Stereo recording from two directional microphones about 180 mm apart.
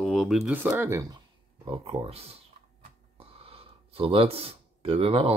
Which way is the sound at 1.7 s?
30° right (ahead or behind).